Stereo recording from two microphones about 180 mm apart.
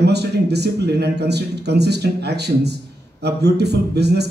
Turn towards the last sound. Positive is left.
turn(degrees=-65)  # may be behind; listen again after turning